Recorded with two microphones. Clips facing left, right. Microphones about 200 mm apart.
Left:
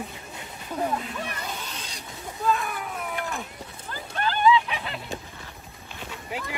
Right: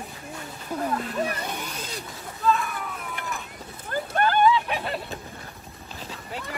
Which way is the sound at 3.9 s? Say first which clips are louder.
Right 6 dB; 55° right (ahead or behind).